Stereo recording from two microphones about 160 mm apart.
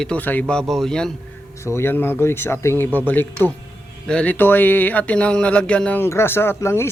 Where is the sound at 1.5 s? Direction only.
20° left (ahead or behind).